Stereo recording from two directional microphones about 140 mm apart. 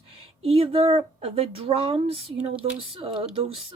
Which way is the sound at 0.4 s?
45° right (ahead or behind).